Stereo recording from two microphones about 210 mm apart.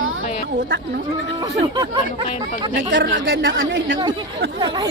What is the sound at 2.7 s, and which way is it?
Speech, 55° right (ahead or behind).